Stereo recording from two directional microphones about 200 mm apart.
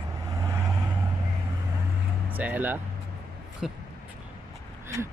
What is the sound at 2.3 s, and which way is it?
Speech, 10° right (ahead or behind).